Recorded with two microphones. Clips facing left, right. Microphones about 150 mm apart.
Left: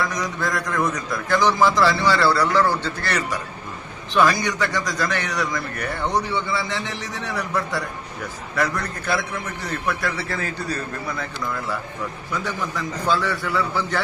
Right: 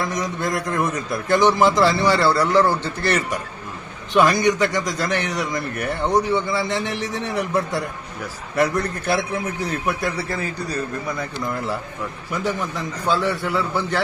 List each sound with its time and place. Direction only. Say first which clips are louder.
0.0 s a man's voice: right 1 dB; 25° right (ahead or behind)